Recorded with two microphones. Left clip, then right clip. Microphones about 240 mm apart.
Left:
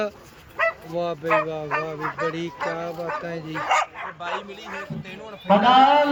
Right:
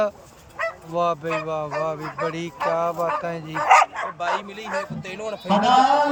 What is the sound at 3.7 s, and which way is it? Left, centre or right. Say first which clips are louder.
Bow-wow: right 7 dB; right.